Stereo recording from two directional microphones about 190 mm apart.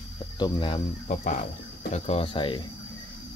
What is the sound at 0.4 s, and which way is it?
Speech, 25° left (ahead or behind).